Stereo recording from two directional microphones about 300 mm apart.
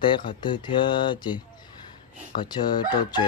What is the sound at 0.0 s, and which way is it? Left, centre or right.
Chicken, centre.